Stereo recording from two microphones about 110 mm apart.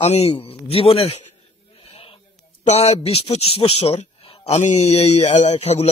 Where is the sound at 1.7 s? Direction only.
55° left (ahead or behind).